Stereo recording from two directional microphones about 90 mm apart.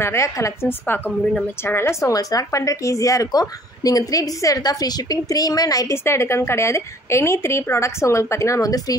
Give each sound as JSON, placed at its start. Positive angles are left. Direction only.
{"t": 0.0, "sound": "a woman's voice", "side_deg": 30}